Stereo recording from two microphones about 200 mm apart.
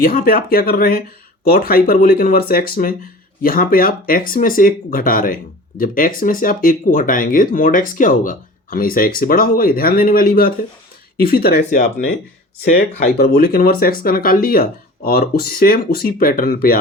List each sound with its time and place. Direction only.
0.0 s speech: 45° left (ahead or behind)